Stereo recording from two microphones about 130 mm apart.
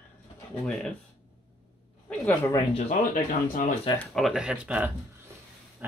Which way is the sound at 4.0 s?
Centre (ahead or behind).